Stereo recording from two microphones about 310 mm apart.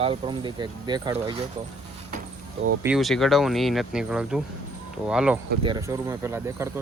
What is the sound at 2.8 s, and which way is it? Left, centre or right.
Speech, centre.